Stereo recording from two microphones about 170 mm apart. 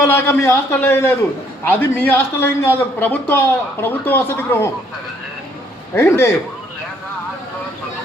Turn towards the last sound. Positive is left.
turn(degrees=15)  # may be behind; listen again after turning